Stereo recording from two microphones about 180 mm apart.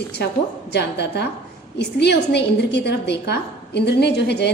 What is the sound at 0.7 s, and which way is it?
A woman's voice, 70° left (ahead or behind).